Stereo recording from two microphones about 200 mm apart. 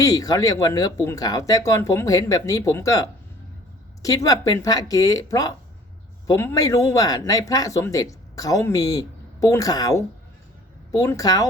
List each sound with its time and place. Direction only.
0.0 s speech: 15° left (ahead or behind)